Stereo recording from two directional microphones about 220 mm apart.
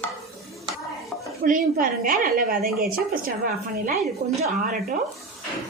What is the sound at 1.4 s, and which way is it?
A woman's voice, 40° right (ahead or behind).